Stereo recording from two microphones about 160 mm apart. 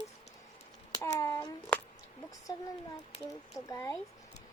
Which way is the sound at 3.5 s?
20° left (ahead or behind).